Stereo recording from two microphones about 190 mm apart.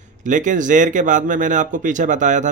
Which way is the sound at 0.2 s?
40° right (ahead or behind).